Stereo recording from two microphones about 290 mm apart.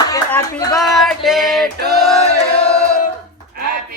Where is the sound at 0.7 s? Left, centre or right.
Centre.